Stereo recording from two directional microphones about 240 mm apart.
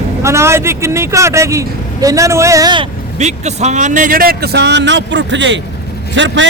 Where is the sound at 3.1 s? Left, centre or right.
Right.